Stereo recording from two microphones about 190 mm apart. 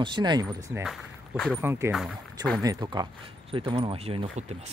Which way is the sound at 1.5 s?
15° right (ahead or behind).